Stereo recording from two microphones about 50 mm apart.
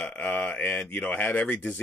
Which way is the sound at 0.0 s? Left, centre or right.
Left.